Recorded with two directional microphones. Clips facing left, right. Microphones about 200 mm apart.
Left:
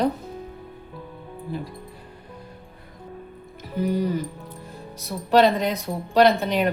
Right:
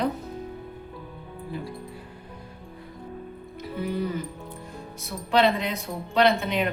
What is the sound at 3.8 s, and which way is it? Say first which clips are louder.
Speech: left 5 dB; 40° left (ahead or behind).